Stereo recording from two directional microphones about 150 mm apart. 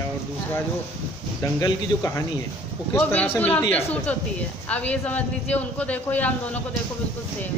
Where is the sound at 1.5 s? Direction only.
20° left (ahead or behind).